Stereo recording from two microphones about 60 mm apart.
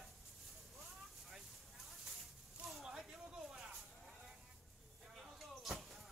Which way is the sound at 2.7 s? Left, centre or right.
Centre.